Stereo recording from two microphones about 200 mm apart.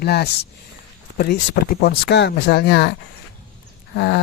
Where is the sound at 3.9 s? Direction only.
60° left (ahead or behind).